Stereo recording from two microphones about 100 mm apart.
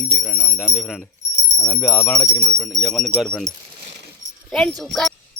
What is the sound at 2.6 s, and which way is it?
Speech, 5° left (ahead or behind).